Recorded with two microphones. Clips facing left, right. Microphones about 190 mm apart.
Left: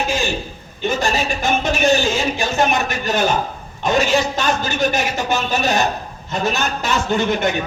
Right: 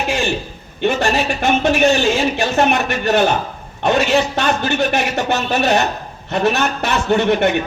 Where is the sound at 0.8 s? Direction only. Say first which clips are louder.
Right 3 dB; 65° right (ahead or behind).